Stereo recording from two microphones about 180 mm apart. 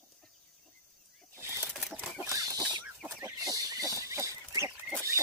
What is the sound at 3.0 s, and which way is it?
Chicken, 15° right (ahead or behind).